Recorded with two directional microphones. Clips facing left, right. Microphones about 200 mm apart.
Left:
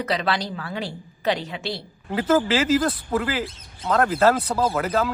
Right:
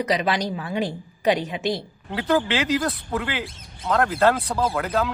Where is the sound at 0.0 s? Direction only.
15° right (ahead or behind).